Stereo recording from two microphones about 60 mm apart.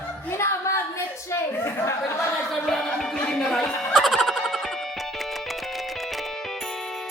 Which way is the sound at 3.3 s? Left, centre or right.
Centre.